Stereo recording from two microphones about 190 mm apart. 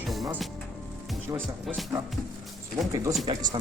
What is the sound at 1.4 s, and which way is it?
Speech, centre (ahead or behind).